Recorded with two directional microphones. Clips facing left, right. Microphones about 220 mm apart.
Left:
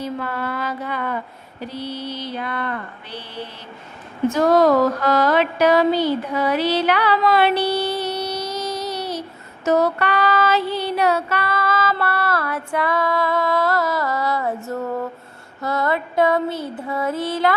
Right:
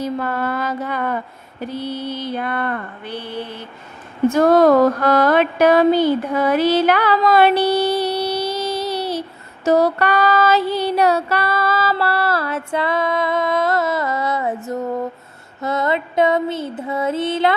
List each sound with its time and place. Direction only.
0.0 s mantra: 45° right (ahead or behind)
4.3 s music: 55° right (ahead or behind); by 9.2 s 30° right (ahead or behind)
9.6 s female singing: 35° right (ahead or behind); by 15.1 s 15° right (ahead or behind)
15.6 s music: 20° right (ahead or behind)